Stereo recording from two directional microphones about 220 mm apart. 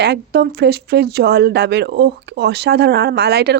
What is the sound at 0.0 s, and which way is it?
Speech, 50° right (ahead or behind).